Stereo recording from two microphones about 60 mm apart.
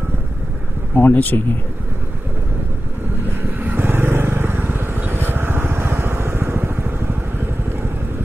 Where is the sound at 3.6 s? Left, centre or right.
Right.